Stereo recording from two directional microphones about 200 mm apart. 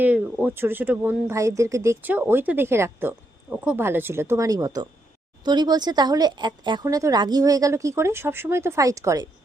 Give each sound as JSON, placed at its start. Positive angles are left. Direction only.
{"t": 0.0, "sound": "speech", "side_deg": -10}